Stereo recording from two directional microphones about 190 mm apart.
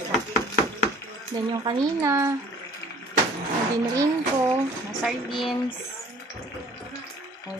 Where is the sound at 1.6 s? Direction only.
20° right (ahead or behind).